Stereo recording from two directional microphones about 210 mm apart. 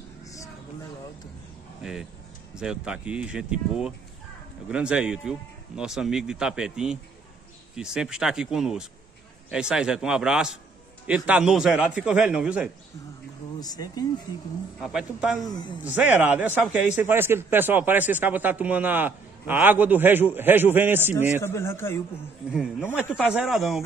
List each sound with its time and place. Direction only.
1.8 s speech: 5° right (ahead or behind)
13.6 s speech: 20° left (ahead or behind)
14.8 s a man's voice: 5° right (ahead or behind)
21.4 s speech: 10° left (ahead or behind)
22.5 s speech: 5° right (ahead or behind)